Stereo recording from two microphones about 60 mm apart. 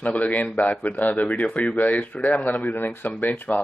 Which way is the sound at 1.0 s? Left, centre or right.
Centre.